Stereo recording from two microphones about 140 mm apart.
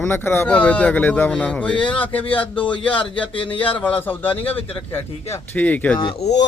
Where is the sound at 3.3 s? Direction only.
40° left (ahead or behind).